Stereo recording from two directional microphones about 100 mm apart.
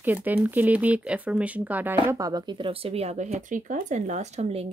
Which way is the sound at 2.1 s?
40° right (ahead or behind).